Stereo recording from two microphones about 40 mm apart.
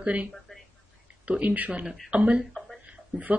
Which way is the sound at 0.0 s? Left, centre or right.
Right.